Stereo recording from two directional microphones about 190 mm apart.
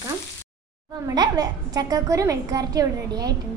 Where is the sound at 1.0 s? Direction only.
20° right (ahead or behind).